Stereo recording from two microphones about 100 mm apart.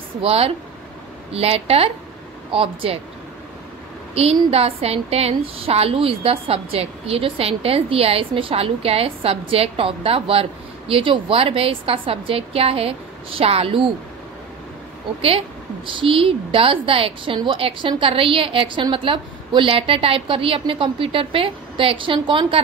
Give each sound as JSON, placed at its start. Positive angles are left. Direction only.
{"t": 0.2, "sound": "a woman's voice", "side_deg": -80}
{"t": 2.5, "sound": "a woman's voice", "side_deg": -65}
{"t": 4.1, "sound": "a woman's voice", "side_deg": -85}
{"t": 15.2, "sound": "a woman's voice", "side_deg": -65}